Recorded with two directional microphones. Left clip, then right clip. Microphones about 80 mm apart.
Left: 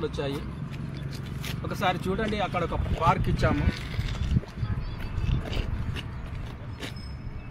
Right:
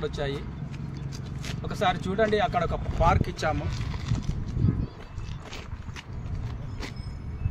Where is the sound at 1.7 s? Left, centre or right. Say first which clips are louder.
Right 1 dB; right.